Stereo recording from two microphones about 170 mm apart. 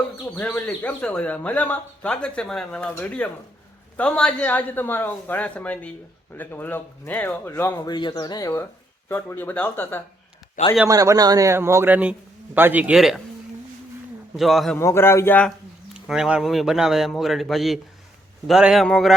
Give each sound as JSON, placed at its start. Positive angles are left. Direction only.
{"t": 0.3, "sound": "speech", "side_deg": 10}
{"t": 10.8, "sound": "speech", "side_deg": -20}
{"t": 14.3, "sound": "a man's voice", "side_deg": 0}
{"t": 14.8, "sound": "speech", "side_deg": 15}
{"t": 16.0, "sound": "a man's voice", "side_deg": -5}